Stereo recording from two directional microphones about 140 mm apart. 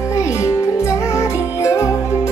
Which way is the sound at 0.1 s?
20° left (ahead or behind).